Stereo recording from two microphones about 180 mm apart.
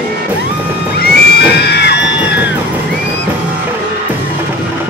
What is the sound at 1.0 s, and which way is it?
Music, 65° left (ahead or behind).